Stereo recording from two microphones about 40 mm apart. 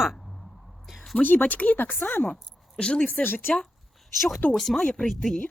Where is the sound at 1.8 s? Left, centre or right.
Left.